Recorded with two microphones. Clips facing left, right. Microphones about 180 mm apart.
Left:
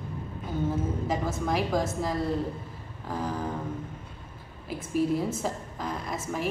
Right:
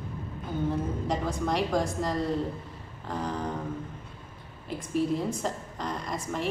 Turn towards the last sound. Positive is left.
turn(degrees=5)  # may be behind; listen again after turning